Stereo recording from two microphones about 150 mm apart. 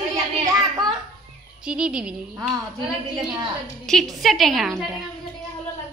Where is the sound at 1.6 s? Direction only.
5° right (ahead or behind).